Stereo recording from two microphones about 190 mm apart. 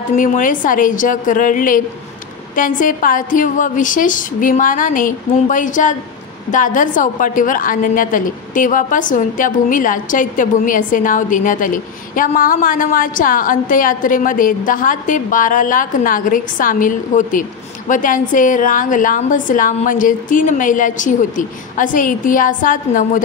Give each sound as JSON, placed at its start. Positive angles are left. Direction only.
{"t": 0.1, "sound": "a woman's voice", "side_deg": 40}